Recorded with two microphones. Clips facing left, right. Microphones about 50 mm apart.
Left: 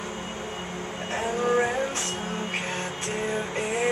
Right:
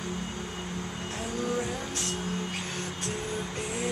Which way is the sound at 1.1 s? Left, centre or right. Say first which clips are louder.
Left 8 dB; left.